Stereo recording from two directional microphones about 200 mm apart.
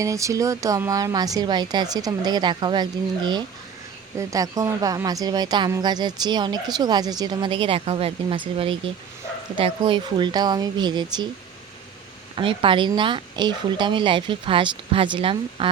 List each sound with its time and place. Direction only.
0.0 s a woman's voice: 15° right (ahead or behind)
12.4 s a woman's voice: 25° right (ahead or behind)